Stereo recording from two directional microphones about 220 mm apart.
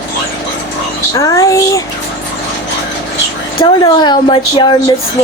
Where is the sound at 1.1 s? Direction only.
15° left (ahead or behind).